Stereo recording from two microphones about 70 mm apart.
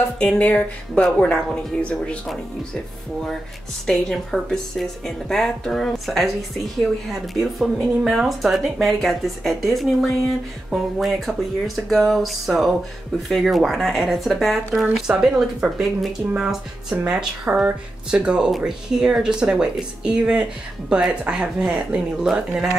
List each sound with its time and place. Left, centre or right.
0.2 s speech: centre
3.8 s speech: centre